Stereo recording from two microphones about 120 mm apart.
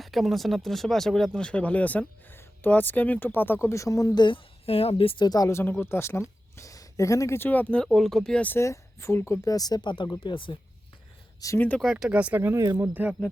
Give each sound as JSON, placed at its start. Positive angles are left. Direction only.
{"t": 0.0, "sound": "speech", "side_deg": 0}
{"t": 4.6, "sound": "a woman's voice", "side_deg": 55}
{"t": 5.2, "sound": "speech", "side_deg": 30}
{"t": 8.5, "sound": "speech", "side_deg": 25}
{"t": 11.3, "sound": "speech", "side_deg": 25}
{"t": 11.8, "sound": "speech", "side_deg": -5}
{"t": 12.4, "sound": "speech", "side_deg": -25}